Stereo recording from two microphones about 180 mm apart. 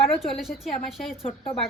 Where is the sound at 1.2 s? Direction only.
30° left (ahead or behind).